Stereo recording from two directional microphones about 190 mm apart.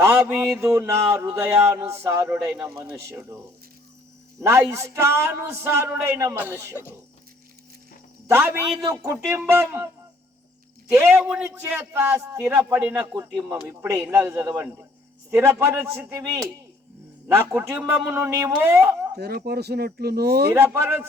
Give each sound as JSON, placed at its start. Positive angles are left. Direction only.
{"t": 0.0, "sound": "a sound", "side_deg": -10}
{"t": 0.6, "sound": "a man's voice", "side_deg": -15}
{"t": 8.3, "sound": "a man's voice", "side_deg": -15}
{"t": 10.9, "sound": "a man's voice", "side_deg": -10}
{"t": 19.1, "sound": "speech", "side_deg": -55}
{"t": 20.5, "sound": "a man's voice", "side_deg": -10}